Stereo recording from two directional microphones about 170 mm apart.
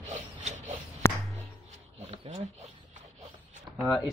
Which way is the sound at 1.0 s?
15° left (ahead or behind).